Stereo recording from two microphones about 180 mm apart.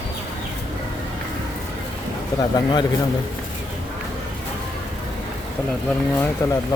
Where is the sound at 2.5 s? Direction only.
25° left (ahead or behind).